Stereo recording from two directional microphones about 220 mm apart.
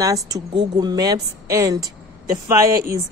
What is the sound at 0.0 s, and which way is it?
Speech, 15° right (ahead or behind).